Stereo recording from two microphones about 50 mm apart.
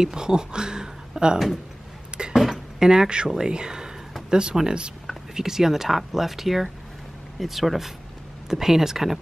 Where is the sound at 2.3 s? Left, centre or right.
Centre.